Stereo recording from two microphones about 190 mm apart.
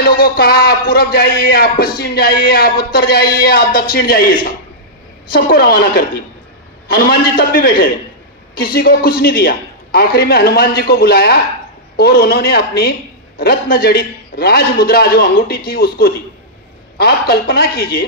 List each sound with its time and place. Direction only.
0.0 s speech: 50° left (ahead or behind)